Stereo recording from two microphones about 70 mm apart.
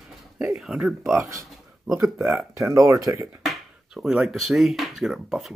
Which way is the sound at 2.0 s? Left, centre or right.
Right.